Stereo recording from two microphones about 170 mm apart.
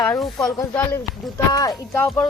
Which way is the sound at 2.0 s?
5° left (ahead or behind).